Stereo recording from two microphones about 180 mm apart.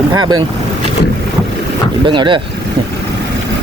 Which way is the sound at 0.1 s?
25° right (ahead or behind).